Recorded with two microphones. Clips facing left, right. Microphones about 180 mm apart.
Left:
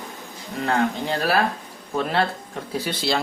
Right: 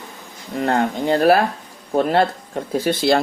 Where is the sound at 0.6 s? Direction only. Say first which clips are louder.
Right 3 dB; 50° right (ahead or behind).